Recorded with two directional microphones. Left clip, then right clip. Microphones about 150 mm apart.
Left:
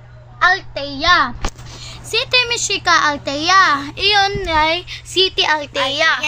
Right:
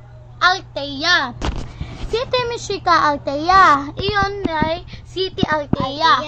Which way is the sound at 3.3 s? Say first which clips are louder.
Left 1 dB; 20° left (ahead or behind).